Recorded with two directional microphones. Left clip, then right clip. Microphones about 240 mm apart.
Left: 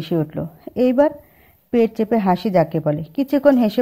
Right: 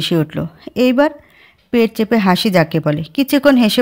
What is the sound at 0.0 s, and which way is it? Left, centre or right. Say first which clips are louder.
Speech: right 5 dB; right.